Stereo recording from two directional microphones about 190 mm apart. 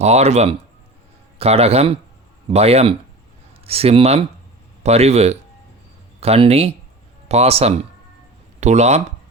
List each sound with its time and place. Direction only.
0.0 s speech: 35° right (ahead or behind)